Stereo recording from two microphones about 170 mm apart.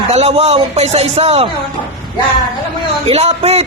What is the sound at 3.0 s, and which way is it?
Speech, 35° right (ahead or behind).